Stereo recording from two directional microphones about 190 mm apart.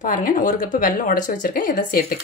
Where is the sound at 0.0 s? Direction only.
45° left (ahead or behind).